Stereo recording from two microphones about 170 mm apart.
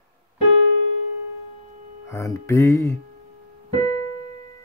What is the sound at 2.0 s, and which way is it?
Speech, 15° left (ahead or behind).